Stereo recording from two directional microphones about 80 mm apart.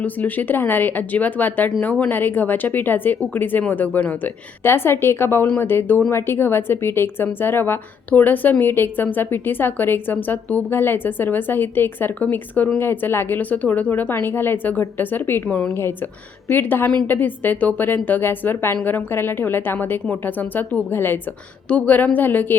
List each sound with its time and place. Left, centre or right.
0.0 s a woman's voice: left